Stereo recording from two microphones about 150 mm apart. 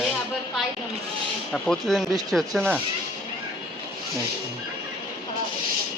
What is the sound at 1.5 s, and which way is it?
Speech, 5° left (ahead or behind).